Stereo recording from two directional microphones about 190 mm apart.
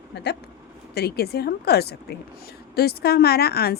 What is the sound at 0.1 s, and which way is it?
Speech, 60° left (ahead or behind).